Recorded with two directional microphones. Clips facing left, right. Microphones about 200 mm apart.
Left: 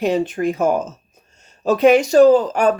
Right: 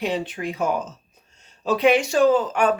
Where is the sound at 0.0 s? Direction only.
45° left (ahead or behind).